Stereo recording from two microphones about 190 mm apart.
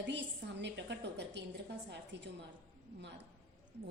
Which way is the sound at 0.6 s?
65° right (ahead or behind).